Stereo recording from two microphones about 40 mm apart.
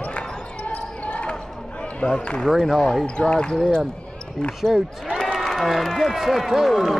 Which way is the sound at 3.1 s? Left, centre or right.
Left.